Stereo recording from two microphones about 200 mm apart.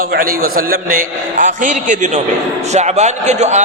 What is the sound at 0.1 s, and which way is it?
A man's voice, 45° right (ahead or behind).